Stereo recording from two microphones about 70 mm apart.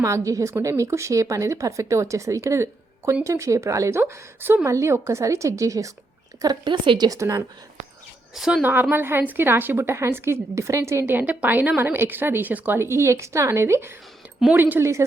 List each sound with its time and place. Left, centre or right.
0.0 s speech: right
4.6 s speech: right
6.4 s speech: right
7.1 s speech: right
8.4 s a woman's voice: centre
8.6 s a woman's voice: right
11.0 s a woman's voice: right
14.5 s a woman's voice: right
14.8 s speech: right